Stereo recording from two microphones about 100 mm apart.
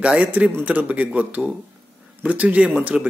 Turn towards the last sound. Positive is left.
turn(degrees=-10)  # may be behind; listen again after turning